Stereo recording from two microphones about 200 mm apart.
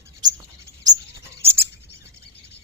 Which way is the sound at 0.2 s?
20° right (ahead or behind).